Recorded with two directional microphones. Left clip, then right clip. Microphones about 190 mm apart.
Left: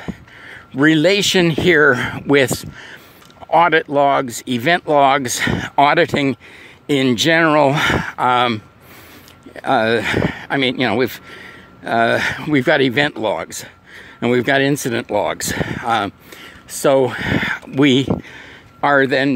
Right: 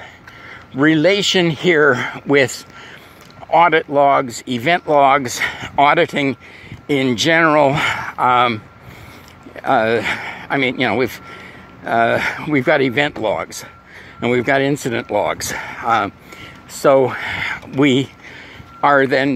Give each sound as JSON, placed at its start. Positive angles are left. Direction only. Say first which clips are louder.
{"t": 0.0, "sound": "speech", "louder": "left 2 dB", "side_deg": 45}